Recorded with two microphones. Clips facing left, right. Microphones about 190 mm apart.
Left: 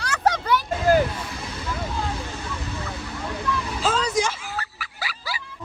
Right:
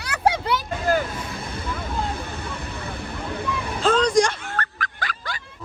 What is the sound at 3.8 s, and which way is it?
Music, 5° left (ahead or behind).